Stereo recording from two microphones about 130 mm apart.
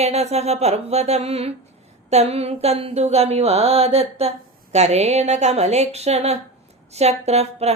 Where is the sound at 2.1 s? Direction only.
55° right (ahead or behind).